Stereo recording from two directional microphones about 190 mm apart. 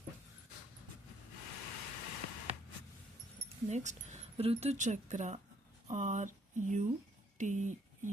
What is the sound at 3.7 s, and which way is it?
Speech, 40° right (ahead or behind).